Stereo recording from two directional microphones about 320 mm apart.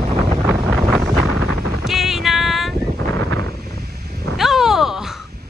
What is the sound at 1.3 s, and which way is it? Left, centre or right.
Wind noise, left.